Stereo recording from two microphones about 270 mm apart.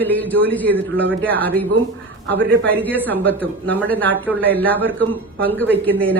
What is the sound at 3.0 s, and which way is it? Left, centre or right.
A woman's voice, centre.